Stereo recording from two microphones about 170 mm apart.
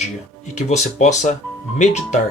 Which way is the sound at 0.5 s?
45° left (ahead or behind).